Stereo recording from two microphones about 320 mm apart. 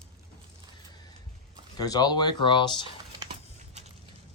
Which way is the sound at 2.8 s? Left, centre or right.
Centre.